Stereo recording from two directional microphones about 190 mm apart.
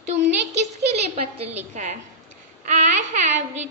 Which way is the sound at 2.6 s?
40° right (ahead or behind).